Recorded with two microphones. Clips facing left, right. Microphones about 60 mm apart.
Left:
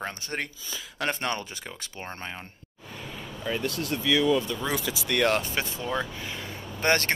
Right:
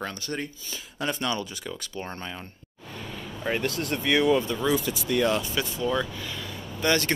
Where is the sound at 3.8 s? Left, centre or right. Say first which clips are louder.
Even; right.